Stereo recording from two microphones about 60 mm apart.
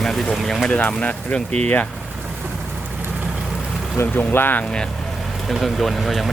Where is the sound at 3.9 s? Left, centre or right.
Left.